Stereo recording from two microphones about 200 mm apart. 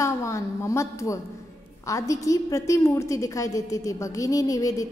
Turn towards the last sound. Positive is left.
turn(degrees=15)  # may be behind; listen again after turning